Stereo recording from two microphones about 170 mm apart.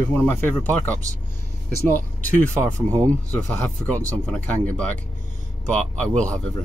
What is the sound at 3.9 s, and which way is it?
Speech, 10° left (ahead or behind).